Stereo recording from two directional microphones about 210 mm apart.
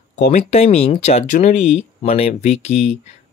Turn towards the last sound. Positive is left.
turn(degrees=30)  # may be behind; listen again after turning